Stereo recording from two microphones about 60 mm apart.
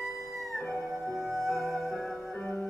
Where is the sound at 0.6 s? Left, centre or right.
Centre.